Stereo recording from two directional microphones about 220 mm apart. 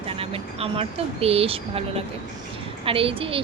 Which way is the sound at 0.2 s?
25° right (ahead or behind).